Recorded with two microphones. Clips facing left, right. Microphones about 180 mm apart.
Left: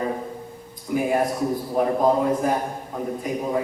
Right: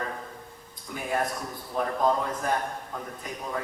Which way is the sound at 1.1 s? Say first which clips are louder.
Left 3 dB; 25° left (ahead or behind).